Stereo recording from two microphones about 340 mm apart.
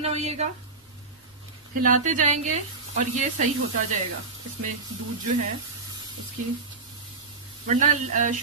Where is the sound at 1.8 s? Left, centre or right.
Right.